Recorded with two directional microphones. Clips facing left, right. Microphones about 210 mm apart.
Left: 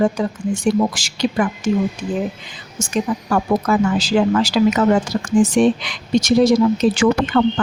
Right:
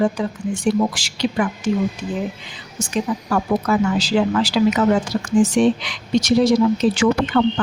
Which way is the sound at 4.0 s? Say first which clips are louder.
Left 2 dB; 45° left (ahead or behind).